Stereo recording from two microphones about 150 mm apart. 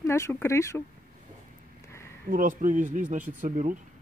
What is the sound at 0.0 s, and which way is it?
Speech, 20° left (ahead or behind).